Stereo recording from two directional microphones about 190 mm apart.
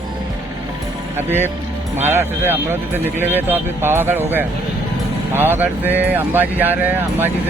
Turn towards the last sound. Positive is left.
turn(degrees=-10)  # may be behind; listen again after turning